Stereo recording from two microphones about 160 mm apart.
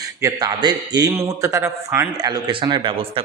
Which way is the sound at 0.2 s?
25° right (ahead or behind).